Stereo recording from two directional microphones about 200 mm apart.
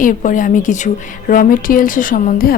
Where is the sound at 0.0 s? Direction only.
40° left (ahead or behind).